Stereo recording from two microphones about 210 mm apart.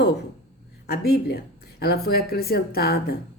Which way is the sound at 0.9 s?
50° left (ahead or behind).